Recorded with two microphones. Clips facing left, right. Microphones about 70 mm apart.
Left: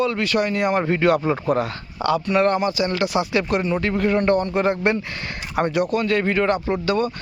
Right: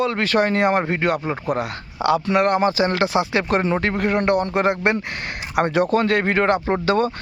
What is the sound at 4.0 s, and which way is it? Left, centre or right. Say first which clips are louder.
Speech: left 2 dB; right.